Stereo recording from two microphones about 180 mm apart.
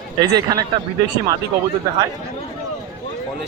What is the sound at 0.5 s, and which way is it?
Speech, 25° right (ahead or behind).